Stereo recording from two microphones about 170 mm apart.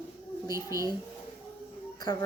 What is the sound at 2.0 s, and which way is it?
Speech, 25° left (ahead or behind).